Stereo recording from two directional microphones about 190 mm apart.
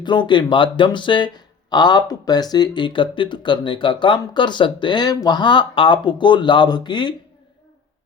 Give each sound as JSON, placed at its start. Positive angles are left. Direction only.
{"t": 0.0, "sound": "speech", "side_deg": 25}